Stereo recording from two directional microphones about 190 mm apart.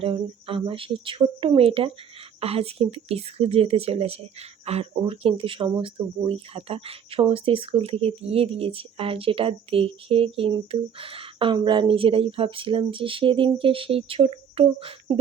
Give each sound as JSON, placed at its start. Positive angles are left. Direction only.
{"t": 0.0, "sound": "a woman's voice", "side_deg": -30}